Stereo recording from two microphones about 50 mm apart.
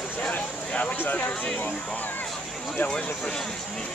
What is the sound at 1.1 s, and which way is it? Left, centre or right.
Speech, left.